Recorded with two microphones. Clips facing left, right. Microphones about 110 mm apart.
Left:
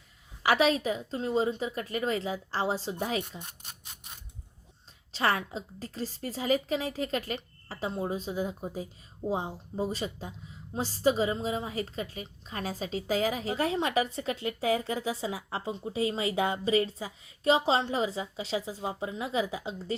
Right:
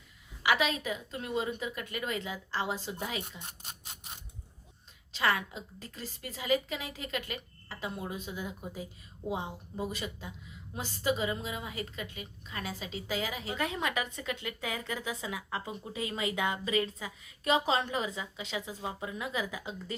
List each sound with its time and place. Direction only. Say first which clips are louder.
0.4 s a woman's voice: left 5 dB; 35° left (ahead or behind)
5.1 s a woman's voice: left 2 dB; 35° left (ahead or behind)